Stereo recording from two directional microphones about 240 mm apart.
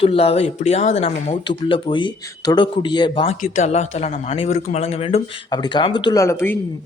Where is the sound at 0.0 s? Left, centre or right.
Left.